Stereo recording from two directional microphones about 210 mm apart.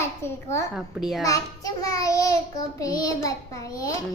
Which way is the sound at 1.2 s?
15° left (ahead or behind).